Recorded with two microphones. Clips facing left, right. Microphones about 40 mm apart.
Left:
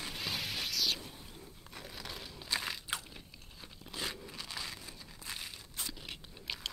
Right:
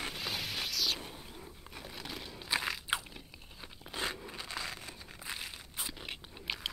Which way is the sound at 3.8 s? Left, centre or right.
Right.